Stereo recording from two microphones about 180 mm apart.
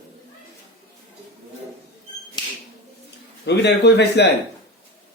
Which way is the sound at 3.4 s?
70° left (ahead or behind).